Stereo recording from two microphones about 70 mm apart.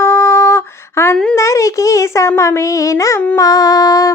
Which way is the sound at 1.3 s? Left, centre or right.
Left.